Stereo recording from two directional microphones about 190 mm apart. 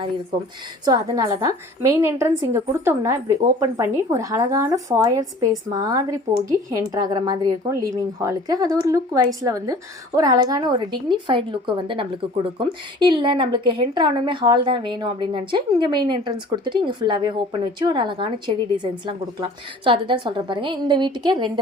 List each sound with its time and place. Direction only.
0.9 s a woman's voice: 20° right (ahead or behind)